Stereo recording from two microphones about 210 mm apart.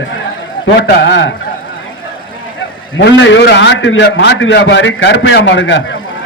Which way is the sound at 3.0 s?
55° left (ahead or behind).